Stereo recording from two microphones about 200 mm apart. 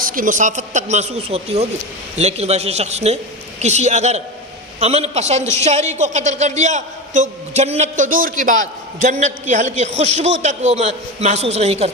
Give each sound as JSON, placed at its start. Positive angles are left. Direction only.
{"t": 0.0, "sound": "a man's voice", "side_deg": -45}